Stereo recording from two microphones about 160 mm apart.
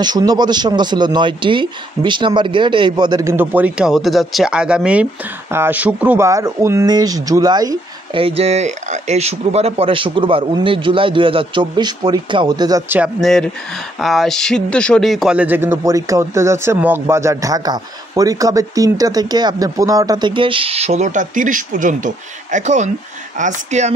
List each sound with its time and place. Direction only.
0.0 s a man's voice: 25° right (ahead or behind)
8.2 s speech: 40° right (ahead or behind)
13.2 s a man's voice: 5° left (ahead or behind); by 23.9 s 50° right (ahead or behind)